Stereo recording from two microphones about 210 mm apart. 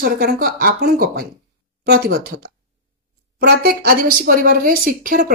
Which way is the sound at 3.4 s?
45° right (ahead or behind).